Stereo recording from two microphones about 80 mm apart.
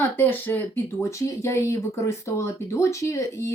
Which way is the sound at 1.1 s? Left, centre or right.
Left.